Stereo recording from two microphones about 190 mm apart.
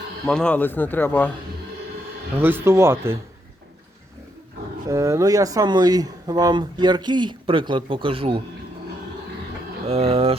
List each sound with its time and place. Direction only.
0.3 s speech: 5° left (ahead or behind)
2.4 s speech: 10° right (ahead or behind)
4.9 s speech: 15° right (ahead or behind)
9.8 s speech: 30° right (ahead or behind)